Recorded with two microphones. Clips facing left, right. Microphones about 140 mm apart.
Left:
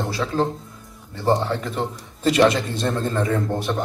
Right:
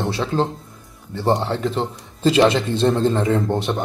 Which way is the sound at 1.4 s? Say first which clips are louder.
Right 2 dB; 30° right (ahead or behind).